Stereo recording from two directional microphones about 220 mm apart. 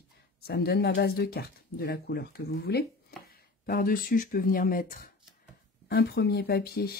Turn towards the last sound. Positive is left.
turn(degrees=45)  # may be behind; listen again after turning